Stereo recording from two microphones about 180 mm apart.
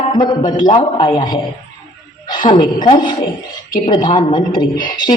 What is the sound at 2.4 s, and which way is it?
Speech, 45° left (ahead or behind).